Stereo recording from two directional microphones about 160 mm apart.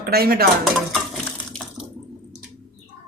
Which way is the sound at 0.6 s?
Centre (ahead or behind).